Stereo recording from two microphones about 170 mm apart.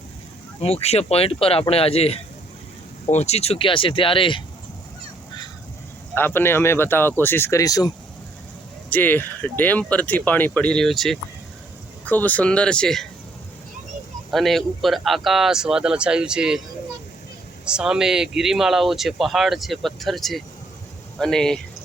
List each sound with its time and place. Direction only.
0.6 s speech: 40° left (ahead or behind)
6.1 s speech: 10° left (ahead or behind)
8.9 s speech: 10° left (ahead or behind)
14.3 s speech: centre (ahead or behind)
17.7 s speech: 5° right (ahead or behind)